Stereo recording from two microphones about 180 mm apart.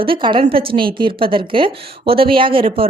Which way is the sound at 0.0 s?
30° right (ahead or behind).